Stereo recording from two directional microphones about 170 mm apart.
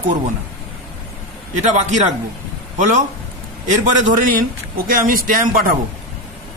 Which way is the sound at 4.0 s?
55° right (ahead or behind).